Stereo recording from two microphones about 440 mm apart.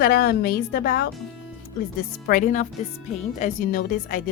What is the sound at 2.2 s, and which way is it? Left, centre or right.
A woman's voice, centre.